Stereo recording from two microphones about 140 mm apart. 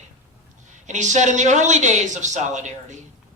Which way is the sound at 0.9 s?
60° right (ahead or behind).